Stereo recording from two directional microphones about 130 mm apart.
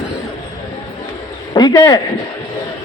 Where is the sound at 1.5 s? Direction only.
30° left (ahead or behind).